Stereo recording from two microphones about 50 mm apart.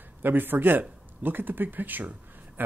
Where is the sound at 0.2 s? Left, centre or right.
Right.